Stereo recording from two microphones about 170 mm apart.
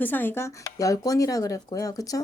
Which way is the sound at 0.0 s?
10° left (ahead or behind).